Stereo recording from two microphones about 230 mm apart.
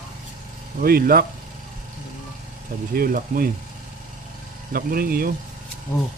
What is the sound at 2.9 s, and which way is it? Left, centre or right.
Speech, right.